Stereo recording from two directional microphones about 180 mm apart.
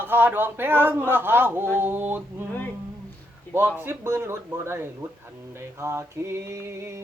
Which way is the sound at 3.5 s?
15° right (ahead or behind).